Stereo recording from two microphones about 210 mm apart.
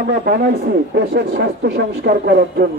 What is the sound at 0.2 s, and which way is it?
Speech, 50° right (ahead or behind).